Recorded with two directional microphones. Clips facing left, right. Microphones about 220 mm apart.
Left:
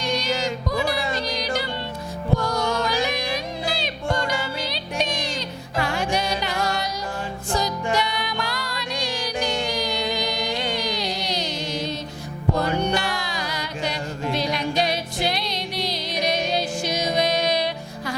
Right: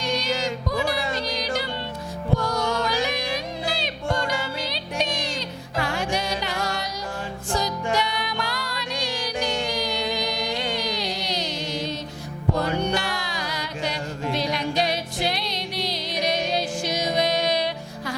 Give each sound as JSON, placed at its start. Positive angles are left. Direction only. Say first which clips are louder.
{"t": 0.0, "sound": "music", "louder": "left 1 dB", "side_deg": 10}
{"t": 2.3, "sound": "music", "louder": "left 1 dB", "side_deg": 25}
{"t": 12.9, "sound": "music", "louder": "left 2 dB", "side_deg": 10}